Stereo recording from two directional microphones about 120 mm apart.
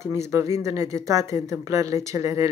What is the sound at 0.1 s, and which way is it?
Speech, 25° right (ahead or behind).